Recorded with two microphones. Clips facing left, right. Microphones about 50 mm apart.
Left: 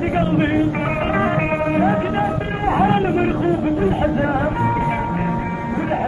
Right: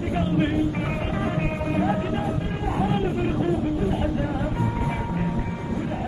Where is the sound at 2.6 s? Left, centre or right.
Left.